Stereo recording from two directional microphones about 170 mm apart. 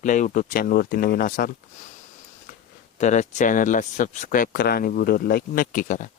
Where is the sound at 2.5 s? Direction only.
60° left (ahead or behind).